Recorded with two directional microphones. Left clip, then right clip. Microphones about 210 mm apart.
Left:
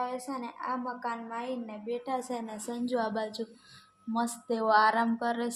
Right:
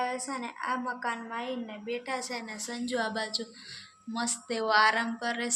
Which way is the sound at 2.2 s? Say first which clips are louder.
Even; 40° left (ahead or behind).